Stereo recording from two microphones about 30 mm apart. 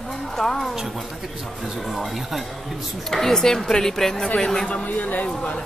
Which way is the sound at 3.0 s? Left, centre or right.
Centre.